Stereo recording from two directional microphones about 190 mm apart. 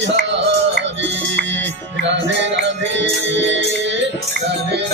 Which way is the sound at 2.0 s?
70° right (ahead or behind).